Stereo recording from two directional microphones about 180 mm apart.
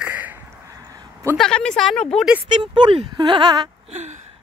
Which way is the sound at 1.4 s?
5° left (ahead or behind).